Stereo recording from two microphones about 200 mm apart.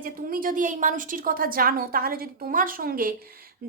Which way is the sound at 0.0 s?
45° right (ahead or behind).